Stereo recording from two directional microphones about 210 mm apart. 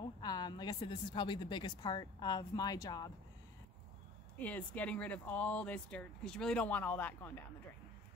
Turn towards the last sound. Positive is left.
turn(degrees=10)  # may be behind; listen again after turning